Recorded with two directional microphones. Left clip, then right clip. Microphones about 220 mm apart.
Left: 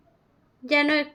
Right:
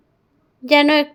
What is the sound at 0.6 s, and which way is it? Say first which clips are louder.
Speech: right 8 dB; 35° right (ahead or behind).